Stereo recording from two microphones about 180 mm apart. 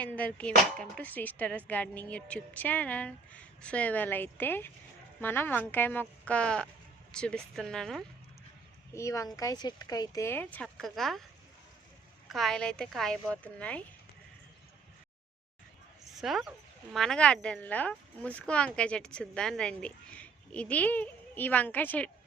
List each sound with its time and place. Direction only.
0.0 s speech: 10° left (ahead or behind)
8.9 s speech: 15° left (ahead or behind)
12.3 s speech: centre (ahead or behind)
16.2 s speech: centre (ahead or behind)